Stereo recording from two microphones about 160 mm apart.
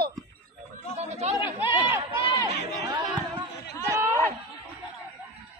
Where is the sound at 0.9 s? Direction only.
45° right (ahead or behind).